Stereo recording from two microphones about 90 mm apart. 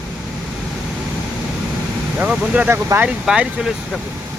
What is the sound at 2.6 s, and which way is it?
Speech, 25° right (ahead or behind).